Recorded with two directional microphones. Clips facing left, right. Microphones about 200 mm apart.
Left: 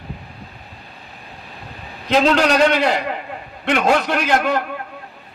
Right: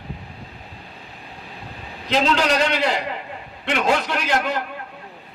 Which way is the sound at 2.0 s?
50° left (ahead or behind).